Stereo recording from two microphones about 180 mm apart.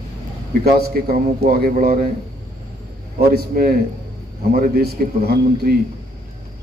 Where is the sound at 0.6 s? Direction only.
60° right (ahead or behind).